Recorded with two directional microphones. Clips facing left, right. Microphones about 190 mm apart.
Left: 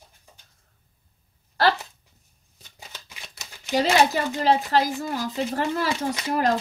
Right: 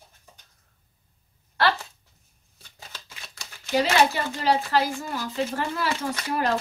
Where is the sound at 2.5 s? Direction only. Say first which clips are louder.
Even; 15° left (ahead or behind).